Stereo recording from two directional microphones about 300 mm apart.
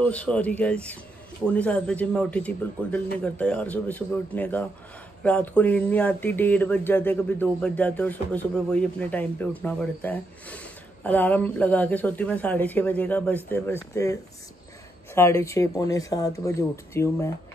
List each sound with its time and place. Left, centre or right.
0.0 s speech: centre
15.1 s speech: centre